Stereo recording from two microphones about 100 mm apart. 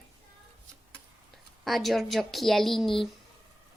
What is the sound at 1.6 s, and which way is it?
A woman's voice, centre (ahead or behind).